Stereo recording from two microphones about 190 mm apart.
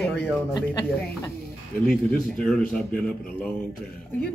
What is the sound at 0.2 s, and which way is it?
Snicker, 15° left (ahead or behind).